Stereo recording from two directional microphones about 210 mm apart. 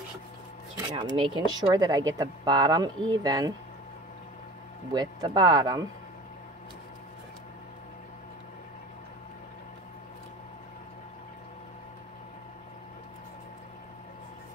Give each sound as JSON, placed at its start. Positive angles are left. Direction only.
{"t": 0.7, "sound": "speech", "side_deg": -20}
{"t": 4.9, "sound": "speech", "side_deg": -20}